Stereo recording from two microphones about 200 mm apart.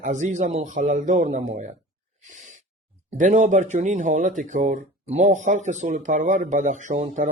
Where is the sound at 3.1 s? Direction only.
40° right (ahead or behind).